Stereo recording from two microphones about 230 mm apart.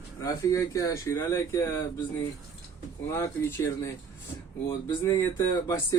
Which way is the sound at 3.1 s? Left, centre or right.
Centre.